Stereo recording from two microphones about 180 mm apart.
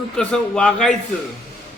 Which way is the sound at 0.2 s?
5° left (ahead or behind).